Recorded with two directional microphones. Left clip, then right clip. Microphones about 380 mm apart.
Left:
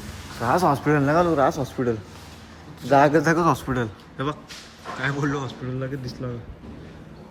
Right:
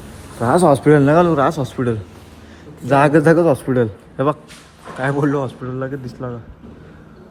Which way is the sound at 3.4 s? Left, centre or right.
Centre.